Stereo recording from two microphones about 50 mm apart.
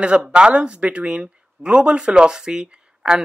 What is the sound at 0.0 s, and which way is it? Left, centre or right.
Speech, right.